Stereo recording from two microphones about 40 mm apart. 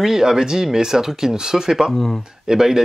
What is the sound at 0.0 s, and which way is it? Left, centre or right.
Speech, centre.